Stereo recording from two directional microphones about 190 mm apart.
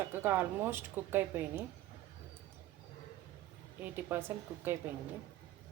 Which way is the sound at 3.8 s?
10° right (ahead or behind).